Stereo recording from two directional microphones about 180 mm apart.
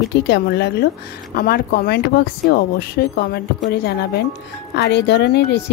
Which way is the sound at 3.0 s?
60° left (ahead or behind).